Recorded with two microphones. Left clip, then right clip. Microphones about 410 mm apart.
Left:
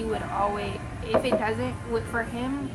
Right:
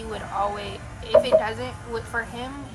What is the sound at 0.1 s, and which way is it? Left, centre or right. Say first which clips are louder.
A woman's voice: right 1 dB; right.